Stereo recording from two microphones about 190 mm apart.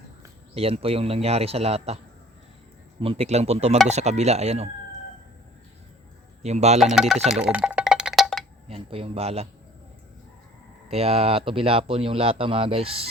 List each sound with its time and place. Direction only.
0.5 s speech: 30° right (ahead or behind)
3.0 s speech: 30° right (ahead or behind)
6.4 s speech: 35° right (ahead or behind)
6.9 s a sound: centre (ahead or behind)
8.6 s speech: 30° right (ahead or behind)
10.8 s speech: 30° right (ahead or behind)